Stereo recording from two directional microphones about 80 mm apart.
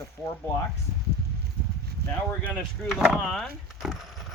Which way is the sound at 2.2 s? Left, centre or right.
Centre.